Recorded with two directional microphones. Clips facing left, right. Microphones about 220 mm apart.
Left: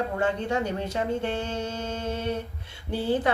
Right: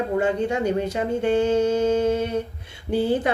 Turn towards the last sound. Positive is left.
turn(degrees=-15)  # may be behind; listen again after turning